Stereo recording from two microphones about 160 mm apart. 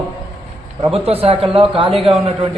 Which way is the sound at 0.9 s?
35° right (ahead or behind).